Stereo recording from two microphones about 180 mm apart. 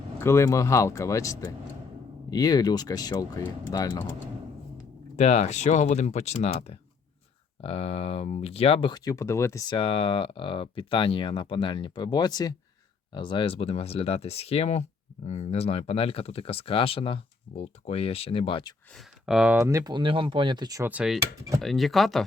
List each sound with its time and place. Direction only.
0.2 s speech: 15° left (ahead or behind)
5.1 s speech: 35° left (ahead or behind)
18.9 s speech: 5° right (ahead or behind)
19.6 s speech: 20° right (ahead or behind); by 22.2 s centre (ahead or behind)